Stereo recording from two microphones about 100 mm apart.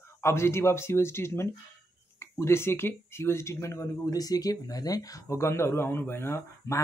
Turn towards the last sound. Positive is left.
turn(degrees=30)  # may be behind; listen again after turning